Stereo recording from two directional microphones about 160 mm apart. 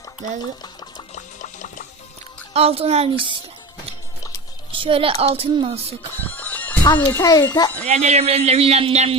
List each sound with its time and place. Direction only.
0.6 s a sound: 25° left (ahead or behind)
1.1 s liquid: 50° left (ahead or behind)
2.5 s speech: 40° right (ahead or behind)
4.7 s speech: 35° right (ahead or behind)
6.3 s music: 10° left (ahead or behind)
6.8 s a child's voice: 30° left (ahead or behind)
7.9 s speech: 45° right (ahead or behind)